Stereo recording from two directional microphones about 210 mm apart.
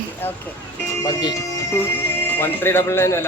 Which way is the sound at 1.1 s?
20° left (ahead or behind).